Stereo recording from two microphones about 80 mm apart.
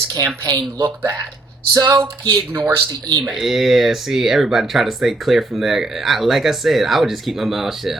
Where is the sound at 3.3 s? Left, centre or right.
Centre.